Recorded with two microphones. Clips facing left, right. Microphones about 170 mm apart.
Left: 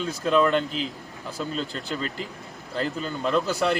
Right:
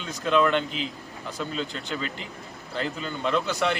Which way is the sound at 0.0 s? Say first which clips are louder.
Left 3 dB; 40° left (ahead or behind).